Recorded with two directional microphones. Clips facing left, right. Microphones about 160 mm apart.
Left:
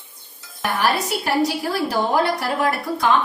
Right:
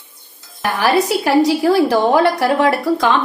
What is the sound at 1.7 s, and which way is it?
Speech, 90° right.